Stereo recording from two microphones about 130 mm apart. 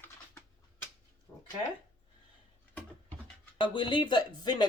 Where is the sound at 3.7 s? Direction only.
40° left (ahead or behind).